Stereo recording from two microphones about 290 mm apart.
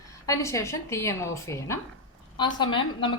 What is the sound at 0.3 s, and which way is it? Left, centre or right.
A woman's voice, centre.